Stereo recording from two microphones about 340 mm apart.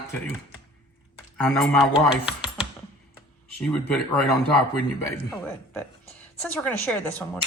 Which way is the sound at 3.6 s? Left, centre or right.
Centre.